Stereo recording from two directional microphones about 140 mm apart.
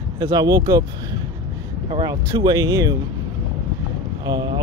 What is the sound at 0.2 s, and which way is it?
Speech, 25° right (ahead or behind).